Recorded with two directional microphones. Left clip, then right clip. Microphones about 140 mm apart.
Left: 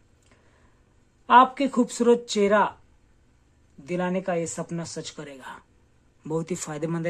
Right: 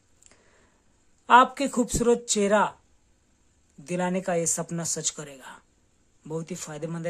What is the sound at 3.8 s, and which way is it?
Speech, 25° right (ahead or behind).